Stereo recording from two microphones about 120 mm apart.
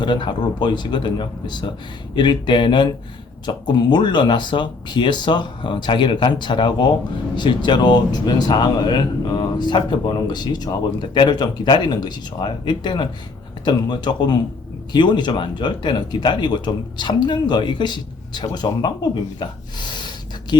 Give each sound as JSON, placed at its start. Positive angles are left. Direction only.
{"t": 0.0, "sound": "speech", "side_deg": 40}
{"t": 20.5, "sound": "speech", "side_deg": 40}